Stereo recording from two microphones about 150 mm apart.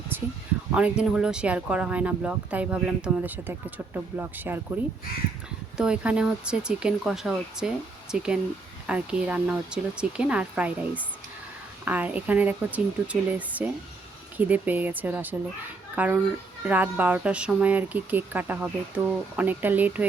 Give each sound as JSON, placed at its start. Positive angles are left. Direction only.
{"t": 0.1, "sound": "a sound", "side_deg": -15}
{"t": 0.7, "sound": "speech", "side_deg": -10}
{"t": 5.7, "sound": "speech", "side_deg": -5}